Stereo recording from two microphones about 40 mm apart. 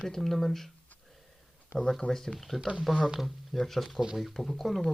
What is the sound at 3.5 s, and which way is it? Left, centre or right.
Speech, centre.